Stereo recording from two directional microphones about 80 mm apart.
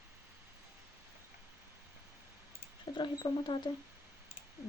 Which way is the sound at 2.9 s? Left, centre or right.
Left.